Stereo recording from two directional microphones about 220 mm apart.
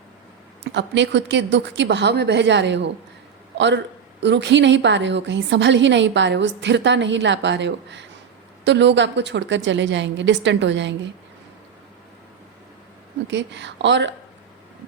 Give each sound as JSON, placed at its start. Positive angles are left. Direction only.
{"t": 0.6, "sound": "a woman's voice", "side_deg": -55}
{"t": 4.2, "sound": "a woman's voice", "side_deg": -50}
{"t": 13.2, "sound": "a woman's voice", "side_deg": -55}